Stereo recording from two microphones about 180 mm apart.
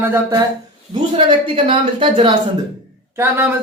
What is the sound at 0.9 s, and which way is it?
Speech, 25° right (ahead or behind).